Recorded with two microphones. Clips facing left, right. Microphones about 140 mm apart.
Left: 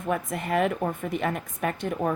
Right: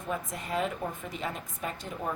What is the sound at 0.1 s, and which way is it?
A woman's voice, 65° left (ahead or behind).